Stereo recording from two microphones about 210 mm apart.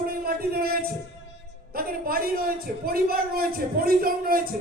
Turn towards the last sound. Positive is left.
turn(degrees=-45)  # may be behind; listen again after turning